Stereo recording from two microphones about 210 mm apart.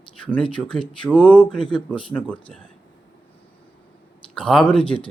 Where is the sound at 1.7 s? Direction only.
25° left (ahead or behind).